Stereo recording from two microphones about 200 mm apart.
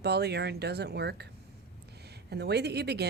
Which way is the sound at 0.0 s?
55° right (ahead or behind).